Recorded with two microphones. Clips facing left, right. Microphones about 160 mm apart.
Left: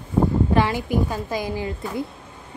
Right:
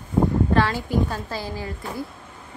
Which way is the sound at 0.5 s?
15° left (ahead or behind).